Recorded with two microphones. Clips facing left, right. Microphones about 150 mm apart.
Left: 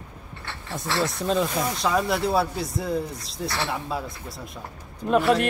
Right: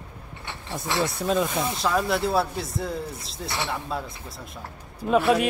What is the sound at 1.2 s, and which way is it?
Speech, centre (ahead or behind).